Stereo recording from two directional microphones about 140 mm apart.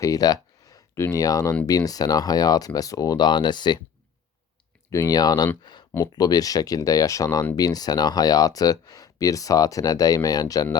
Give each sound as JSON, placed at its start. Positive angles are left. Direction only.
{"t": 0.0, "sound": "a sound", "side_deg": 25}
{"t": 1.0, "sound": "speech", "side_deg": 25}
{"t": 4.9, "sound": "speech", "side_deg": 25}